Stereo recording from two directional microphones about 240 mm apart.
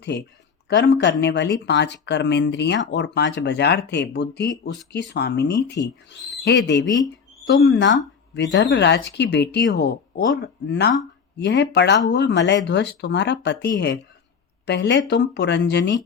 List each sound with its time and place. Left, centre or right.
0.0 s speech: left